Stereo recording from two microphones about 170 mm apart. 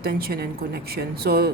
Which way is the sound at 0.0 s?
60° right (ahead or behind).